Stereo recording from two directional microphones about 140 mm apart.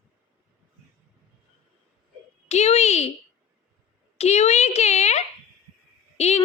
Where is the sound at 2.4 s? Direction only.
50° left (ahead or behind).